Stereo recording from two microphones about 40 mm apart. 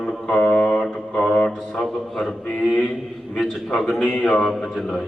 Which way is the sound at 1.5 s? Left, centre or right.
Centre.